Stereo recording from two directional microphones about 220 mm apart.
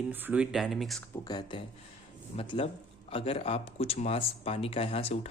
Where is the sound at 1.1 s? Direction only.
20° left (ahead or behind).